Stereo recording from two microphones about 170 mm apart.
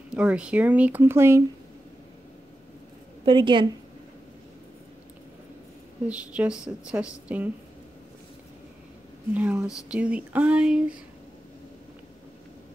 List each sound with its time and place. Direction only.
0.1 s speech: 5° right (ahead or behind)
3.3 s a woman's voice: 30° right (ahead or behind)
6.0 s speech: 5° right (ahead or behind)
9.3 s speech: 10° right (ahead or behind)